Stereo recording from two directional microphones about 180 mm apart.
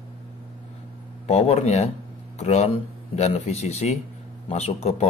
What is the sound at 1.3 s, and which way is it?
Speech, 35° left (ahead or behind).